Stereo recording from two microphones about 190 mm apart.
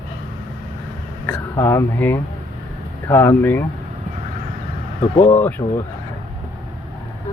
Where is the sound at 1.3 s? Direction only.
10° left (ahead or behind).